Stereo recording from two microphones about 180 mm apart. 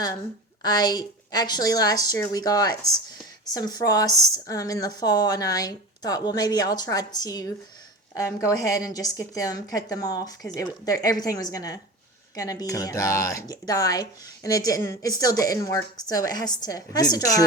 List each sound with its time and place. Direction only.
0.6 s speech: 20° left (ahead or behind)